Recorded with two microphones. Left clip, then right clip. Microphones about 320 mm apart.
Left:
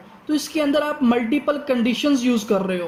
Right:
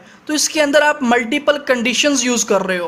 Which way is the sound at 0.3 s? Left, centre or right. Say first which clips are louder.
Right 6 dB; right.